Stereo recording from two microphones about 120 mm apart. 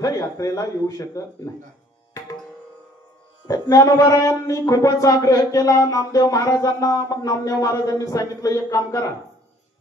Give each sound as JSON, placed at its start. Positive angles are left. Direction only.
{"t": 0.0, "sound": "speech", "side_deg": 30}
{"t": 3.4, "sound": "speech", "side_deg": 30}